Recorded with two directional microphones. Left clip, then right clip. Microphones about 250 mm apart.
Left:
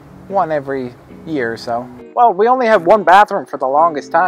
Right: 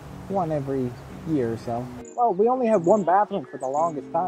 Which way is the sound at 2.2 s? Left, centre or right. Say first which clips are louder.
Left 9 dB; left.